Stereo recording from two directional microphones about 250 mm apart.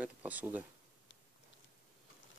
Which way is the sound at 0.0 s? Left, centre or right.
Centre.